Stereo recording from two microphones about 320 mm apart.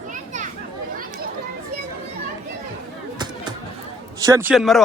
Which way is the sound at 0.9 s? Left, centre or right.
Right.